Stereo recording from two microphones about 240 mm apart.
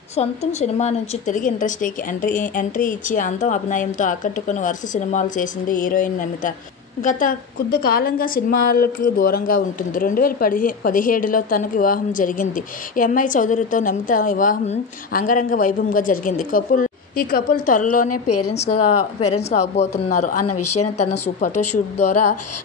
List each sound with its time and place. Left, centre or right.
0.1 s a woman's voice: left
18.1 s speech: left
18.5 s a woman's voice: left
20.4 s speech: left
21.0 s a woman's voice: left